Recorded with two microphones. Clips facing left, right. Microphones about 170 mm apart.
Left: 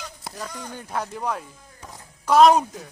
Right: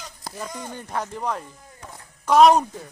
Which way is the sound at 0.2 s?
Centre (ahead or behind).